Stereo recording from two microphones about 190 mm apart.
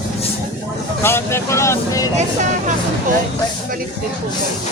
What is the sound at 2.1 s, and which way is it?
Speech, 40° right (ahead or behind).